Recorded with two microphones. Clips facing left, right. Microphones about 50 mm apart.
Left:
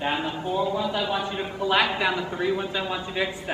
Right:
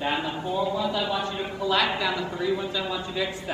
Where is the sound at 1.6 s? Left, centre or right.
Left.